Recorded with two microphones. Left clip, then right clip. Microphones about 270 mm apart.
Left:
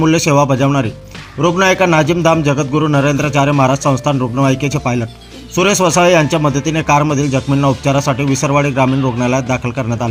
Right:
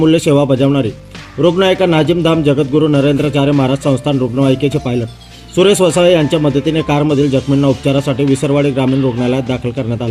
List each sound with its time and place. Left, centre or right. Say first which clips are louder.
0.0 s a man's voice: right 1 dB; centre